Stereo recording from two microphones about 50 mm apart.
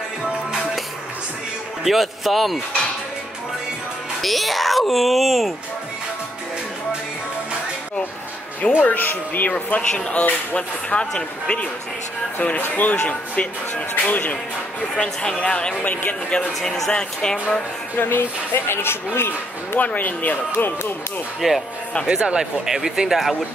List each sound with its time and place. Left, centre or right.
1.9 s speech: centre
4.2 s speech: centre
8.8 s speech: left
9.8 s speech: left
12.4 s speech: left
12.9 s speech: left
14.8 s speech: left
16.6 s speech: centre
16.9 s speech: centre
17.9 s speech: left
19.8 s speech: left
20.5 s speech: left
21.4 s speech: centre
22.0 s speech: centre